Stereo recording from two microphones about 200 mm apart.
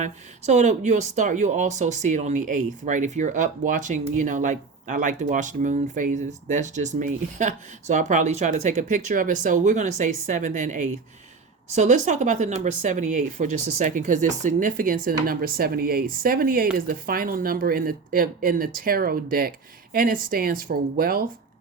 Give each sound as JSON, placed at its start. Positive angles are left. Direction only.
{"t": 0.0, "sound": "speech", "side_deg": -35}